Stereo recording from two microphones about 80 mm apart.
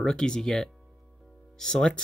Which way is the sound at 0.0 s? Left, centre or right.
Centre.